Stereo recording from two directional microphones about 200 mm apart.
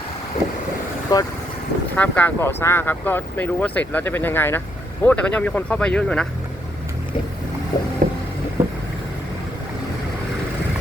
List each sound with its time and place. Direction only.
1.1 s speech: 15° left (ahead or behind)
8.0 s vehicle: 45° right (ahead or behind)
8.6 s vehicle: 10° right (ahead or behind)